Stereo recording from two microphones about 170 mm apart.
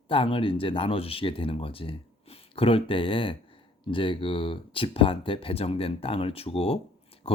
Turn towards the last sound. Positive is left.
turn(degrees=35)  # may be behind; listen again after turning